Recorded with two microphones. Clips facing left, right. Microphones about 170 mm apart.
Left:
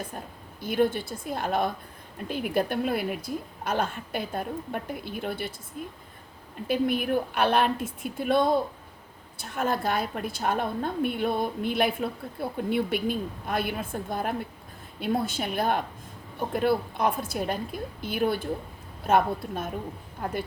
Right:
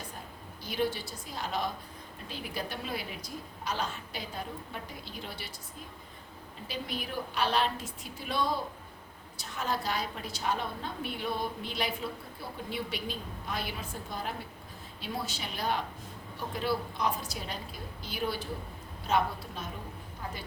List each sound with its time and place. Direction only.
0.6 s a woman's voice: 55° left (ahead or behind)
6.7 s a woman's voice: 55° left (ahead or behind)